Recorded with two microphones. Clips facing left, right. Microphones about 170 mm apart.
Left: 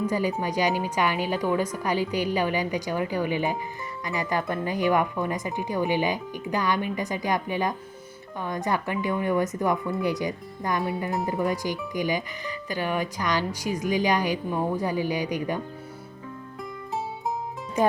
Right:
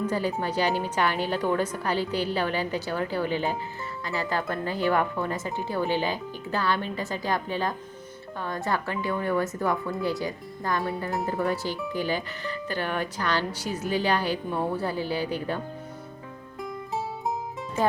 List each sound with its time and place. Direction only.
0.0 s speech: 10° left (ahead or behind)
17.8 s speech: 15° left (ahead or behind)